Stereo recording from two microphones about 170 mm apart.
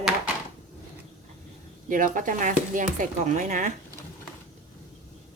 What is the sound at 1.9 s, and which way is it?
Speech, 50° right (ahead or behind).